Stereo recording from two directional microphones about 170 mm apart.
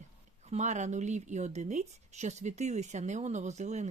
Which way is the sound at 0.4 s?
40° right (ahead or behind).